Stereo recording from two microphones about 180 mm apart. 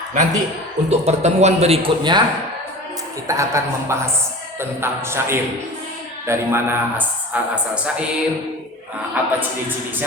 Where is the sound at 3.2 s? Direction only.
15° right (ahead or behind).